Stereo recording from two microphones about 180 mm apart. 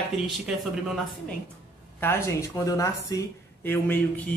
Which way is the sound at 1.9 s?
15° left (ahead or behind).